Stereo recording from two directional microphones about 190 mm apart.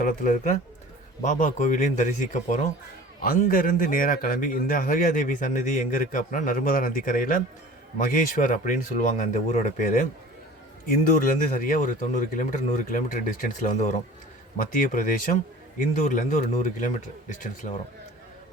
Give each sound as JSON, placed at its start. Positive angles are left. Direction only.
{"t": 0.0, "sound": "a man's voice", "side_deg": 50}